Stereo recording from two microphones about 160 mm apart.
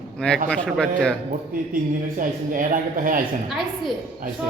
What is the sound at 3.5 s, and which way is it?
Speech, centre (ahead or behind).